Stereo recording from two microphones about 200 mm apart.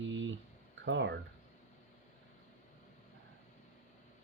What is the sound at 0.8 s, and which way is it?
Speech, 60° right (ahead or behind).